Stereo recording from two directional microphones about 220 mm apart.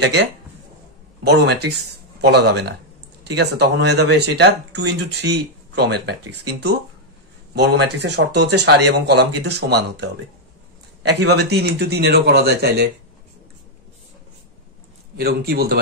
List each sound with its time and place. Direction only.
0.0 s speech: 50° right (ahead or behind)
7.5 s speech: 50° right (ahead or behind)
11.1 s speech: 50° right (ahead or behind)
15.1 s speech: 45° right (ahead or behind)